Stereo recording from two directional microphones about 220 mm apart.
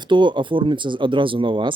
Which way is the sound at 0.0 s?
20° right (ahead or behind).